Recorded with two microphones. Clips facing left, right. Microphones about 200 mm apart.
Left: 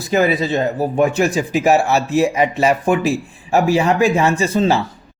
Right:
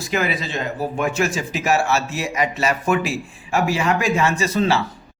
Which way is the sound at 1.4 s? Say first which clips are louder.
Left 6 dB; 20° left (ahead or behind).